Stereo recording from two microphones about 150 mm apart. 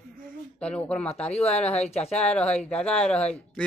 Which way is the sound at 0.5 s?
5° left (ahead or behind).